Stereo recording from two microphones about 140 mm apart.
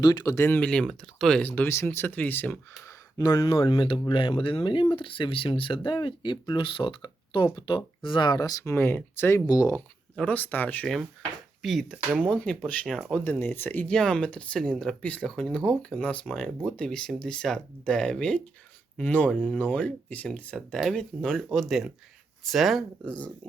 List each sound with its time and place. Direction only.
0.0 s speech: 30° left (ahead or behind)
0.3 s speech: 15° left (ahead or behind)
2.8 s a sound: 25° left (ahead or behind)
3.4 s speech: 40° left (ahead or behind)
8.7 s speech: 15° left (ahead or behind)
10.2 s speech: 10° left (ahead or behind)
11.6 s speech: centre (ahead or behind)